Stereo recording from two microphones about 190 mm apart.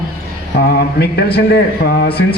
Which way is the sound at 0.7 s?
55° left (ahead or behind).